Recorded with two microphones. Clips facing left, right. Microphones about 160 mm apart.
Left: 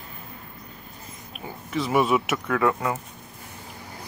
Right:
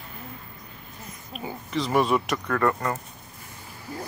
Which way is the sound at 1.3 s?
5° left (ahead or behind).